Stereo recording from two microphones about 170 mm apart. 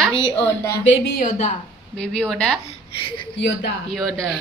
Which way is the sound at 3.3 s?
90° left.